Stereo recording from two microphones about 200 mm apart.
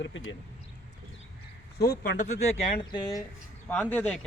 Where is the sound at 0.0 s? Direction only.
70° left (ahead or behind).